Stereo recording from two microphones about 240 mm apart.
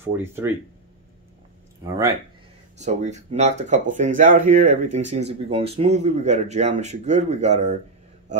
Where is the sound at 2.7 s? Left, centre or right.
Right.